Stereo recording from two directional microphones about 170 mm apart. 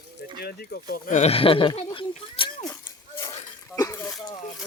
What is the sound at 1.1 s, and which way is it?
Speech, 35° left (ahead or behind).